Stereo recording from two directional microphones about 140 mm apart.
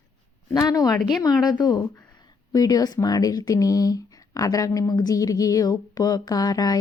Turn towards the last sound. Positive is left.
turn(degrees=25)  # may be behind; listen again after turning